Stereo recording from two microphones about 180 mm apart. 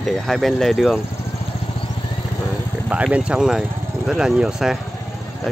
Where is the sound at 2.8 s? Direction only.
5° right (ahead or behind).